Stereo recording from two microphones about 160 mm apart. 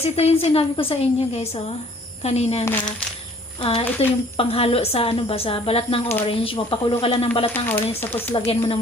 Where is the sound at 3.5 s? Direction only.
35° left (ahead or behind).